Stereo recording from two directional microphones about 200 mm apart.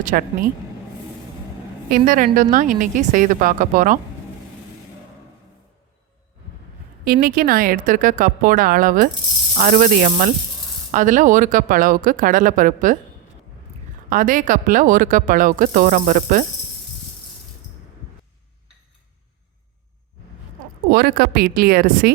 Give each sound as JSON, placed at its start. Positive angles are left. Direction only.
{"t": 0.0, "sound": "speech", "side_deg": -40}
{"t": 1.9, "sound": "speech", "side_deg": -45}
{"t": 7.0, "sound": "speech", "side_deg": -50}
{"t": 14.1, "sound": "speech", "side_deg": -45}
{"t": 20.9, "sound": "speech", "side_deg": -50}